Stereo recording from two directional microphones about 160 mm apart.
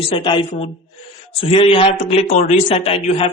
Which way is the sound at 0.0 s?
35° left (ahead or behind).